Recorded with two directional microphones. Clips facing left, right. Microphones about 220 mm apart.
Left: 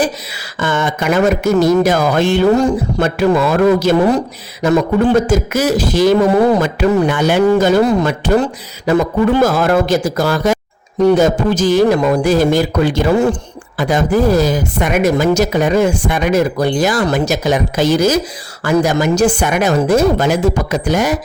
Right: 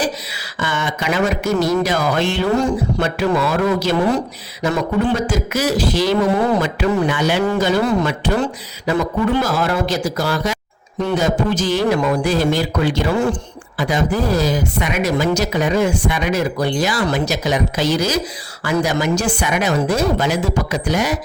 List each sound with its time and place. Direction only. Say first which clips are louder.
0.6 s a man's voice: left 5 dB; 50° left (ahead or behind)